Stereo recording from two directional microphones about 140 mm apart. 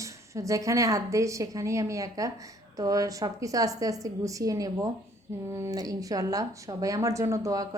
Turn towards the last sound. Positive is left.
turn(degrees=-25)  # may be behind; listen again after turning